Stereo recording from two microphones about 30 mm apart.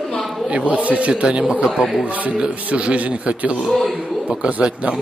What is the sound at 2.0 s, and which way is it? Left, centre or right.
Speech, right.